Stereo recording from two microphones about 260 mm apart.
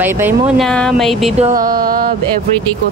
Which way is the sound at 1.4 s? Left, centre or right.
Right.